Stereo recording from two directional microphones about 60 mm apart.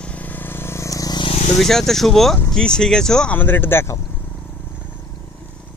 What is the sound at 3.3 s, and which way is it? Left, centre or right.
Speech, left.